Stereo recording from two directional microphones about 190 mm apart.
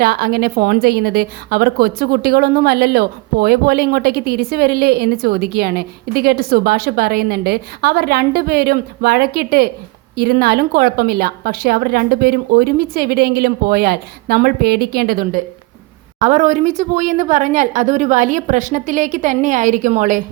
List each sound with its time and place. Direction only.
0.0 s a woman's voice: 55° right (ahead or behind)
16.2 s a woman's voice: 40° right (ahead or behind)